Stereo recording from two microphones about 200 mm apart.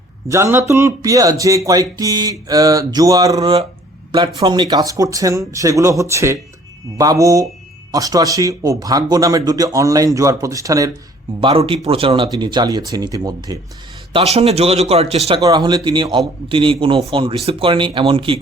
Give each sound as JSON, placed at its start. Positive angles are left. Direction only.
{"t": 0.3, "sound": "speech", "side_deg": -15}
{"t": 11.3, "sound": "speech", "side_deg": -25}
{"t": 14.1, "sound": "speech", "side_deg": -30}
{"t": 15.4, "sound": "speech", "side_deg": -20}